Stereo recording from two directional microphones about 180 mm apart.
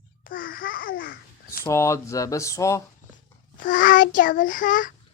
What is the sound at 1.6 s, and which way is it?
Speech, 15° left (ahead or behind).